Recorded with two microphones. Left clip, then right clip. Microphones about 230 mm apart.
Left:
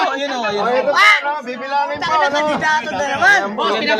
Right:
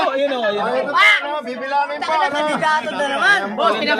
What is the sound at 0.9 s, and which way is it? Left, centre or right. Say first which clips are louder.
Speech: left 1 dB; left.